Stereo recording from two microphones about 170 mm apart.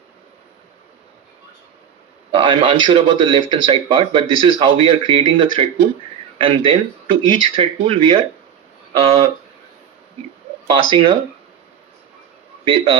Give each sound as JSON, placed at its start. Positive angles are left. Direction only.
{"t": 2.3, "sound": "speech", "side_deg": -30}
{"t": 10.7, "sound": "speech", "side_deg": -30}
{"t": 12.6, "sound": "speech", "side_deg": -30}